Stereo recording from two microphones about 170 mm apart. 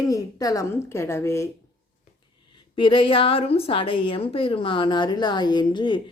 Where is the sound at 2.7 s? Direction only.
30° left (ahead or behind).